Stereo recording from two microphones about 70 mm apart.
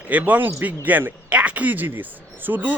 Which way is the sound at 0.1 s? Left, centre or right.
Right.